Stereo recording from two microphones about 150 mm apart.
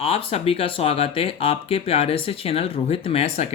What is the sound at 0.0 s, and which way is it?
Speech, 40° left (ahead or behind).